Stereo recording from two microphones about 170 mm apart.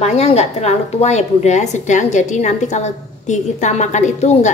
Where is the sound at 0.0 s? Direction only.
40° left (ahead or behind).